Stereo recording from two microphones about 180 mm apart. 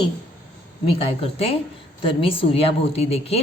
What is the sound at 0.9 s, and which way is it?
A woman's voice, 30° left (ahead or behind).